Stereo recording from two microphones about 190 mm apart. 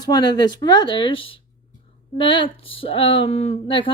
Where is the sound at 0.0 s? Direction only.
20° left (ahead or behind).